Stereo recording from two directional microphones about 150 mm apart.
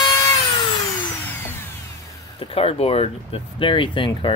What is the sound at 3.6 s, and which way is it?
Speech, 35° left (ahead or behind).